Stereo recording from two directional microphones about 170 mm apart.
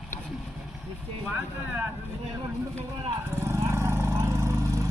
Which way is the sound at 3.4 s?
15° right (ahead or behind).